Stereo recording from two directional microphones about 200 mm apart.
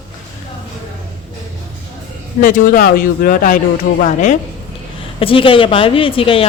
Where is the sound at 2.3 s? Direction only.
40° left (ahead or behind).